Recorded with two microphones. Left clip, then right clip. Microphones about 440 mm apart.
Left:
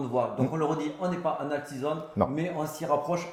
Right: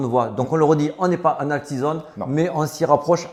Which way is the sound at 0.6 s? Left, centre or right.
Right.